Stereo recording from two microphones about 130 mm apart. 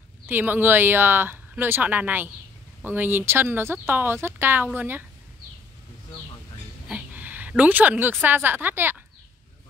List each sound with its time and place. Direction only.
0.3 s speech: 15° right (ahead or behind)
6.9 s a woman's voice: 10° right (ahead or behind)